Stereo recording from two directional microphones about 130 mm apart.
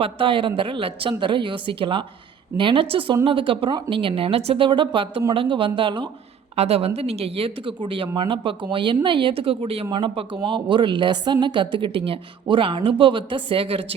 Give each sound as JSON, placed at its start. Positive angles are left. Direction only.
{"t": 0.0, "sound": "speech", "side_deg": -40}
{"t": 6.6, "sound": "speech", "side_deg": -50}